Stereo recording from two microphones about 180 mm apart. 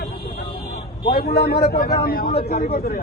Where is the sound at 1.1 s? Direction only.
60° left (ahead or behind).